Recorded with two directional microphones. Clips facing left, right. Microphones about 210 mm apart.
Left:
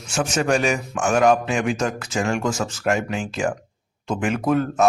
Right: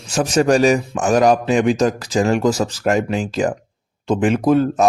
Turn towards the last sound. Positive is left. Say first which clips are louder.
# right 5 dB
turn(degrees=-30)  # may be behind; listen again after turning